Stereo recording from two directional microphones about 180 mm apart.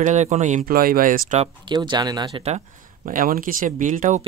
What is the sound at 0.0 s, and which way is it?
Speech, 40° right (ahead or behind).